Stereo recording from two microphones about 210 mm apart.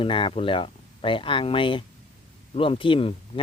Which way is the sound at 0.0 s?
25° left (ahead or behind).